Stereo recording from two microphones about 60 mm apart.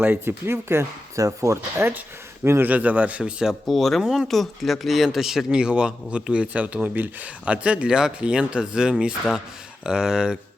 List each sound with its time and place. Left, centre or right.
0.0 s speech: right
0.4 s speech: right
1.1 s speech: right
2.4 s speech: right
2.6 s speech: right
3.7 s speech: centre
4.0 s speech: centre
4.3 s speech: centre